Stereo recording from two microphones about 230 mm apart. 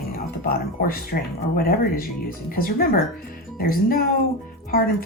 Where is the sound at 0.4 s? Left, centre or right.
Left.